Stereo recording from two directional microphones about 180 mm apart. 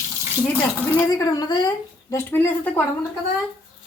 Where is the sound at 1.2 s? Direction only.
20° left (ahead or behind).